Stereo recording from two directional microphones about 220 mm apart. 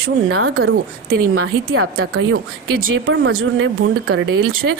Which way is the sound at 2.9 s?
65° right (ahead or behind).